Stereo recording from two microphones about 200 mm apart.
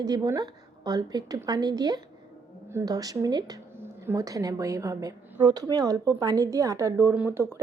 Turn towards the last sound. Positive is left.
turn(degrees=-10)  # may be behind; listen again after turning